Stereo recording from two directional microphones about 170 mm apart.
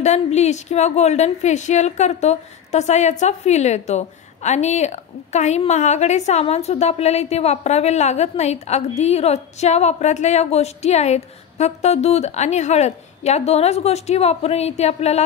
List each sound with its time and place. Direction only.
0.0 s a woman's voice: 40° left (ahead or behind)